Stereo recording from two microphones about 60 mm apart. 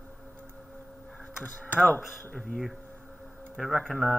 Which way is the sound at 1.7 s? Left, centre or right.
Left.